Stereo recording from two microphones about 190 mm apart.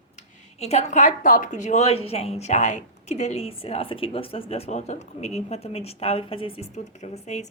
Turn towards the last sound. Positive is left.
turn(degrees=35)  # may be behind; listen again after turning